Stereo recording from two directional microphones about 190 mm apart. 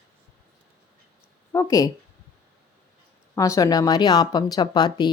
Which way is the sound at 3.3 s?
15° left (ahead or behind).